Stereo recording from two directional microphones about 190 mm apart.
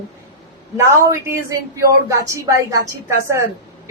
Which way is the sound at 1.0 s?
15° right (ahead or behind).